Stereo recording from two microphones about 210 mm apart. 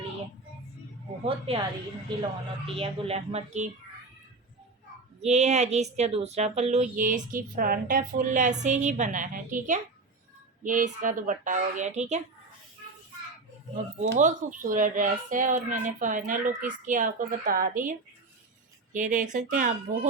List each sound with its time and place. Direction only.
1.2 s speech: 25° right (ahead or behind)
2.6 s speech: 25° right (ahead or behind)
5.2 s speech: 30° right (ahead or behind)
14.0 s speech: 35° right (ahead or behind)
18.9 s speech: 40° right (ahead or behind)